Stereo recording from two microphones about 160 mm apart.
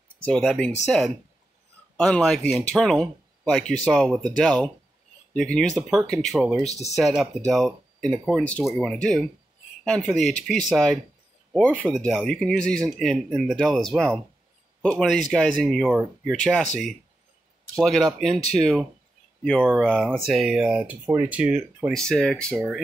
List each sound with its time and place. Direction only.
0.2 s speech: 5° left (ahead or behind)
6.6 s speech: 45° left (ahead or behind)
7.0 s speech: centre (ahead or behind)
17.7 s speech: centre (ahead or behind)
21.9 s speech: 5° left (ahead or behind)